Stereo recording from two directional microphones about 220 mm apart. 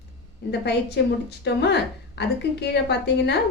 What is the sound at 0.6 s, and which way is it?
A woman's voice, 50° left (ahead or behind).